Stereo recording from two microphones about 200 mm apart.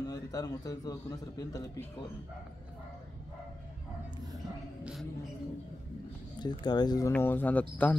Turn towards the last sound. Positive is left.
turn(degrees=10)  # may be behind; listen again after turning